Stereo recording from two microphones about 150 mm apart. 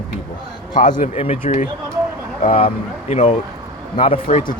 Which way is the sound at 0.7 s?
60° left (ahead or behind).